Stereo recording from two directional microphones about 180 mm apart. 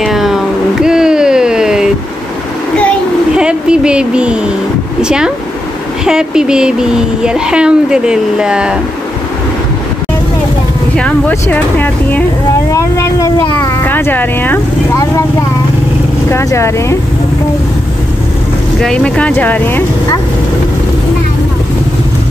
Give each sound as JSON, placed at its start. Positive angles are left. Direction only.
{"t": 0.0, "sound": "a sound", "side_deg": 0}
{"t": 3.3, "sound": "speech", "side_deg": -5}
{"t": 11.0, "sound": "speech", "side_deg": 5}
{"t": 12.7, "sound": "a sound", "side_deg": 15}
{"t": 13.8, "sound": "vehicle", "side_deg": 10}
{"t": 16.3, "sound": "speech", "side_deg": 15}
{"t": 18.8, "sound": "speech", "side_deg": 5}